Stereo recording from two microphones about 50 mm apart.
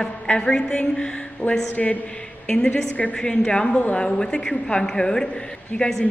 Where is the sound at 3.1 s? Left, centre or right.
Centre.